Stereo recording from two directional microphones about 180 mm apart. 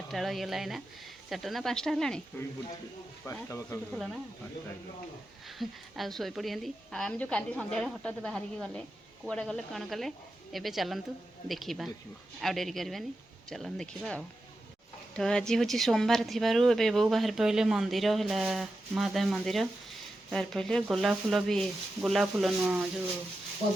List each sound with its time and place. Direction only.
0.1 s speech: centre (ahead or behind)
3.2 s speech: 15° left (ahead or behind)
3.9 s speech: centre (ahead or behind)
5.5 s speech: centre (ahead or behind)